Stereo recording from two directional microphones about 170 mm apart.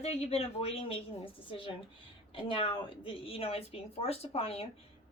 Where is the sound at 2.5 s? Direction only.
30° left (ahead or behind).